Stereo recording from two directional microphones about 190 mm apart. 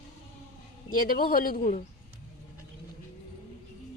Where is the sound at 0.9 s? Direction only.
50° left (ahead or behind).